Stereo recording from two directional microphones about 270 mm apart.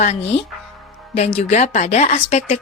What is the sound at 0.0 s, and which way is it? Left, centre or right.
Speech, left.